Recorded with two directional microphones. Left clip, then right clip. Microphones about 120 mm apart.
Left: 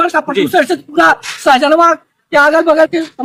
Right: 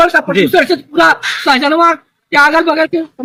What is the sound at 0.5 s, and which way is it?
Speech, 40° left (ahead or behind).